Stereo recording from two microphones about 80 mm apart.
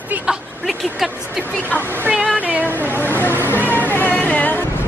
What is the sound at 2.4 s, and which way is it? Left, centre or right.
Speech, right.